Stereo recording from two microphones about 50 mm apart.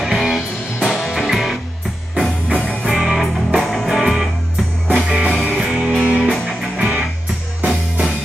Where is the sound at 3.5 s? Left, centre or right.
Centre.